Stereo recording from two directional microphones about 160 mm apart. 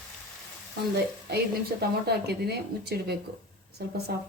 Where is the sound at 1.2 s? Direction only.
90° right.